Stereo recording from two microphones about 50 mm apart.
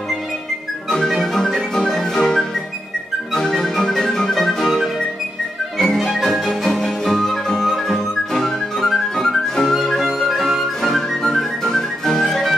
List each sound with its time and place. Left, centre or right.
0.8 s music: centre